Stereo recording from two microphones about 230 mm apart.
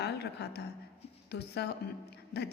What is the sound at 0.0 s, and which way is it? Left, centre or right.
A woman's voice, left.